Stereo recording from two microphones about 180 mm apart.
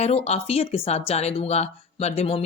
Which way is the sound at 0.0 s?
35° left (ahead or behind).